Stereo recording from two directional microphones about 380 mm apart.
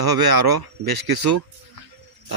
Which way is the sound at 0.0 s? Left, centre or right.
Right.